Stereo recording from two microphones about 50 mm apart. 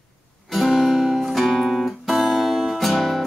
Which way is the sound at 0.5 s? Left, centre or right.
Centre.